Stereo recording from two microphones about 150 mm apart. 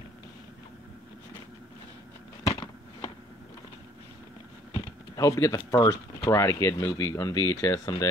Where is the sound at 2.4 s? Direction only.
20° left (ahead or behind).